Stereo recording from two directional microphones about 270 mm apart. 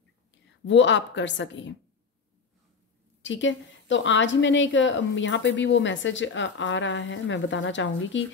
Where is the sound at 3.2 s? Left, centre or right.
Left.